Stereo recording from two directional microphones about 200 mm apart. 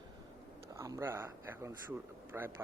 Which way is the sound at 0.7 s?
15° right (ahead or behind).